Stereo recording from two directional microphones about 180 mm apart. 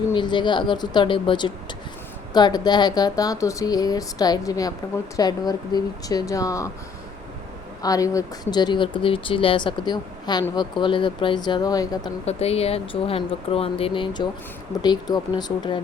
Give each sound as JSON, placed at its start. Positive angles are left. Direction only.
{"t": 0.1, "sound": "speech", "side_deg": 25}
{"t": 7.8, "sound": "speech", "side_deg": 20}
{"t": 12.2, "sound": "speech", "side_deg": 35}